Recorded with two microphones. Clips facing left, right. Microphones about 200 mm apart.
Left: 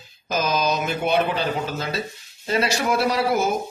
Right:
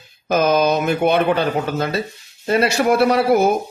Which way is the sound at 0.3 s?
60° right (ahead or behind).